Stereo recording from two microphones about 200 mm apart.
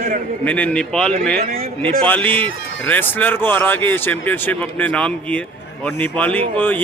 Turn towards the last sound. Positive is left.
turn(degrees=10)  # may be behind; listen again after turning